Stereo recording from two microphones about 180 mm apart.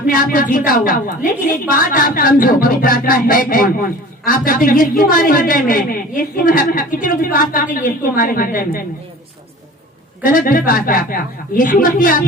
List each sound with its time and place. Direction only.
0.1 s a woman's voice: 50° left (ahead or behind)
10.2 s a woman's voice: 50° left (ahead or behind)